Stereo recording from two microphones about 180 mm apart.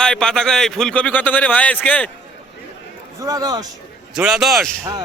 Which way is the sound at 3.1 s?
20° right (ahead or behind).